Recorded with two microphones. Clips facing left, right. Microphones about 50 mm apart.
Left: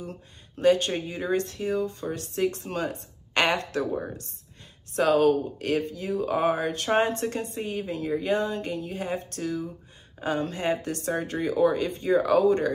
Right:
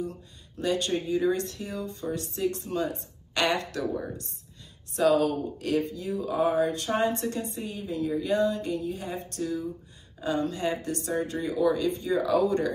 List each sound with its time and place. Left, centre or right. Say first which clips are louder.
0.0 s speech: right 4 dB; left
11.6 s speech: left 1 dB; left
12.4 s speech: left 4 dB; left